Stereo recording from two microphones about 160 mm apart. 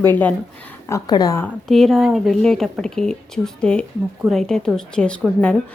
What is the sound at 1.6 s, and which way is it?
A woman's voice, centre (ahead or behind).